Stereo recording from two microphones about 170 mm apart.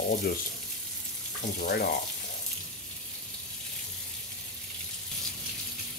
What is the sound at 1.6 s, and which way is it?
Speech, 65° left (ahead or behind).